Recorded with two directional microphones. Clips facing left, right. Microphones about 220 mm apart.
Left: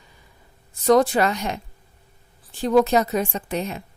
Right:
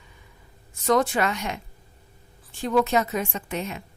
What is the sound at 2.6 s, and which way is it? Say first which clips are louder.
Speech: left 4 dB; 35° left (ahead or behind).